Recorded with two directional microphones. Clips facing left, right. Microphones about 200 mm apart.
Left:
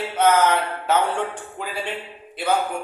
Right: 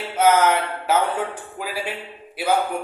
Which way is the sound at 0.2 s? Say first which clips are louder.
Right 1 dB; 10° right (ahead or behind).